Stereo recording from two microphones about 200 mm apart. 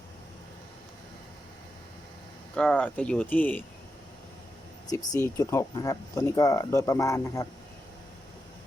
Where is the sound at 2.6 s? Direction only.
5° left (ahead or behind).